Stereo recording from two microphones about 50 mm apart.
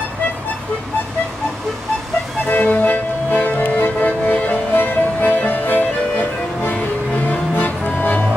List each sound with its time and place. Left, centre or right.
2.5 s music: left
7.2 s music: left